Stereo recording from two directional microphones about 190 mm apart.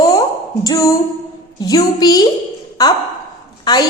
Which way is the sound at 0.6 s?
15° left (ahead or behind).